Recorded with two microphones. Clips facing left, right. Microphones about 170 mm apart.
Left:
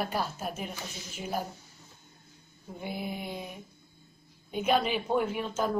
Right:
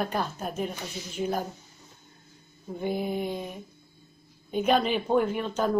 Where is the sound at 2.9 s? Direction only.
40° right (ahead or behind).